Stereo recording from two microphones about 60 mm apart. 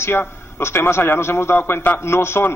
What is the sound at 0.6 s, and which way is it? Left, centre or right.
A man's voice, left.